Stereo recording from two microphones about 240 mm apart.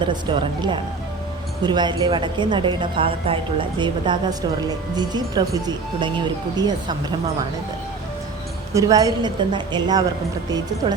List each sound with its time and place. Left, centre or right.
0.3 s a woman's voice: centre
8.7 s a woman's voice: centre